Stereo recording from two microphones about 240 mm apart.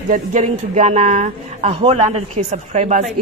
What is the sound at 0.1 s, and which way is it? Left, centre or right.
A woman's voice, right.